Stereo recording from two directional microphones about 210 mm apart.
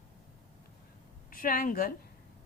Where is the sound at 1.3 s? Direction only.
40° left (ahead or behind).